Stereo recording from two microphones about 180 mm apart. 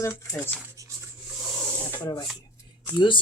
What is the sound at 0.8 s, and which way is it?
Rub, 20° right (ahead or behind).